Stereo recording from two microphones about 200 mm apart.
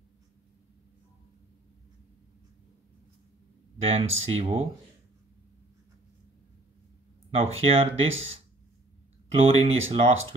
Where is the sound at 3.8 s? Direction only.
30° right (ahead or behind).